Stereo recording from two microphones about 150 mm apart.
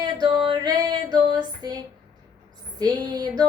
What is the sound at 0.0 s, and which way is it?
Female singing, 30° right (ahead or behind).